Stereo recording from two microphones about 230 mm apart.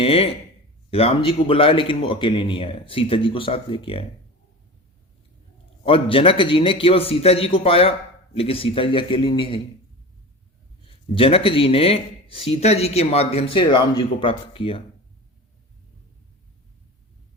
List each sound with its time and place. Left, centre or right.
0.0 s speech: left
5.8 s speech: left
10.8 s speech: left